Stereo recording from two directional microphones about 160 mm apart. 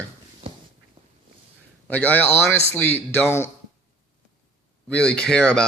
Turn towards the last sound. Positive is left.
turn(degrees=5)  # may be behind; listen again after turning